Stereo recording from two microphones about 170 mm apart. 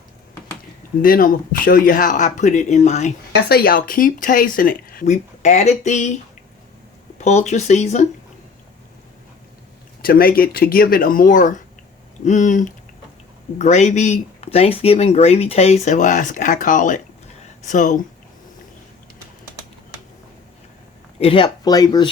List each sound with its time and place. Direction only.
1.0 s speech: 55° left (ahead or behind)
3.5 s speech: 60° left (ahead or behind)
7.2 s speech: 40° left (ahead or behind)
10.0 s speech: 60° left (ahead or behind)
21.2 s speech: 30° left (ahead or behind)